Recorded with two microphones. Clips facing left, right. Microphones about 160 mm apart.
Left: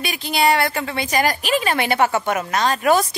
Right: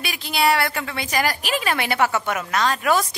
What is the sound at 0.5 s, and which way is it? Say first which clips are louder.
Speech: left 2 dB; 25° left (ahead or behind).